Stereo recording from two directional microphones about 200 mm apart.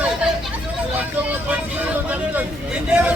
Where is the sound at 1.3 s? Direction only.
10° right (ahead or behind).